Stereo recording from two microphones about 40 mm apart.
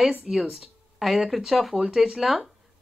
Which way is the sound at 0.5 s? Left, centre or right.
Centre.